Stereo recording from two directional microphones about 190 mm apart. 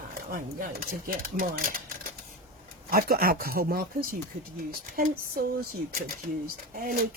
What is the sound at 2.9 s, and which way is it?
Speech, 50° right (ahead or behind).